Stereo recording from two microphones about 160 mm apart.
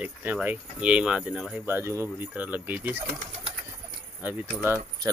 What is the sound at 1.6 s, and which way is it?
Speech, 15° right (ahead or behind).